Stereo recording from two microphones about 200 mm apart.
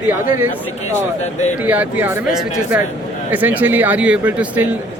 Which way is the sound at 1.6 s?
5° right (ahead or behind).